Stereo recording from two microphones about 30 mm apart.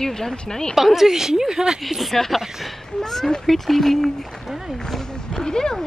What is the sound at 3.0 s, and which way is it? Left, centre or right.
Speech, centre.